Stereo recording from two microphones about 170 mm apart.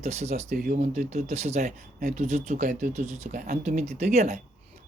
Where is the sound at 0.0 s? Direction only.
40° right (ahead or behind).